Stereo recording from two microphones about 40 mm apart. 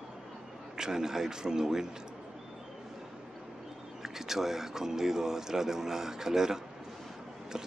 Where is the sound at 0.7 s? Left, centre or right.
Centre.